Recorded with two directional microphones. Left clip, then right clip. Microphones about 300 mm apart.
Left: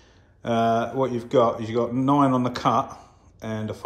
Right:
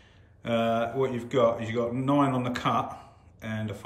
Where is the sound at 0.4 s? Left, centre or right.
Centre.